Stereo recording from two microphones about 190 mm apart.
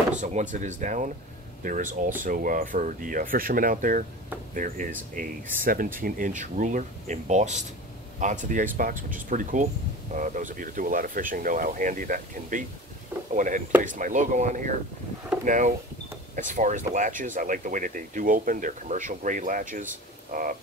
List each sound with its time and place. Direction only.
0.2 s speech: 40° right (ahead or behind)